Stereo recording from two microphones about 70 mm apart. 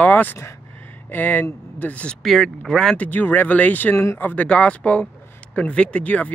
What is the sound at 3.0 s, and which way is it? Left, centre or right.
Speech, left.